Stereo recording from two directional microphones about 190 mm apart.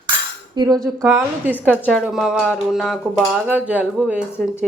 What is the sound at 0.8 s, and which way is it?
Speech, centre (ahead or behind).